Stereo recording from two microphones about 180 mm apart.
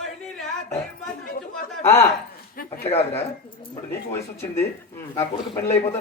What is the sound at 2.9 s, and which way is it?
Speech, 35° left (ahead or behind).